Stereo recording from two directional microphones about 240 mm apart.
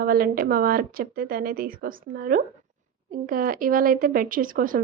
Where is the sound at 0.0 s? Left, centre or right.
Right.